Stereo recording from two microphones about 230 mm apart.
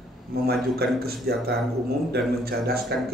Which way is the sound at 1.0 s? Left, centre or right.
Right.